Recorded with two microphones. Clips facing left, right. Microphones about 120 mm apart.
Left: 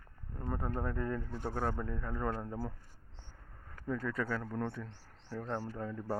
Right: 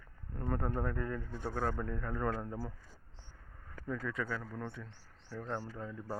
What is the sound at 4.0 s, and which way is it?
A man's voice, 40° left (ahead or behind).